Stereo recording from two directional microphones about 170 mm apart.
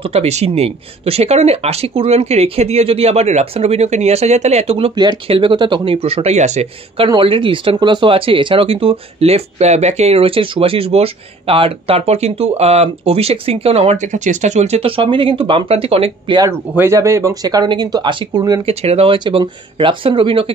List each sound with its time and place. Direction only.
0.0 s speech: 35° right (ahead or behind)
16.3 s speech: 15° right (ahead or behind)
18.7 s speech: 35° right (ahead or behind)